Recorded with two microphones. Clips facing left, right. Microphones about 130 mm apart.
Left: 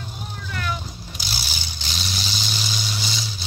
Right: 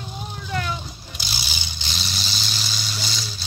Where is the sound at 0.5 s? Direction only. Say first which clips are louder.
Right 2 dB; 25° right (ahead or behind).